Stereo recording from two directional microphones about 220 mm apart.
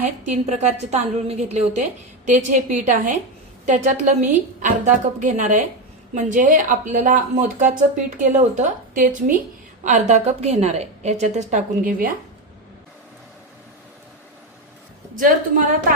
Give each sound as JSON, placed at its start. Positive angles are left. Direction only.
{"t": 0.0, "sound": "speech", "side_deg": -30}
{"t": 4.6, "sound": "speech", "side_deg": -35}
{"t": 15.1, "sound": "speech", "side_deg": -40}